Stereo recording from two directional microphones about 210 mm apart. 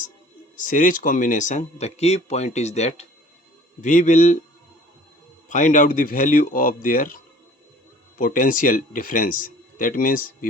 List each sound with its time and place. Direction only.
0.5 s speech: 40° left (ahead or behind)
5.5 s speech: 35° left (ahead or behind)
8.2 s speech: 40° left (ahead or behind)